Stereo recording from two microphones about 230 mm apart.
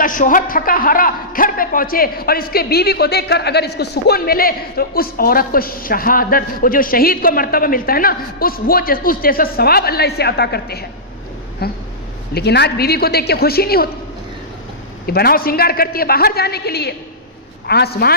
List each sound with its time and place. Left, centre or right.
0.0 s a man's voice: left
15.0 s a man's voice: left